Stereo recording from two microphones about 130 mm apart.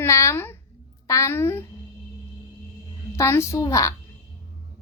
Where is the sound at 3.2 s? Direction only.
20° left (ahead or behind).